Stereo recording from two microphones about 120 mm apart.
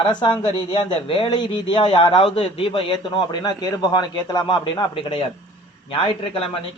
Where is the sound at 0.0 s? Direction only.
40° left (ahead or behind).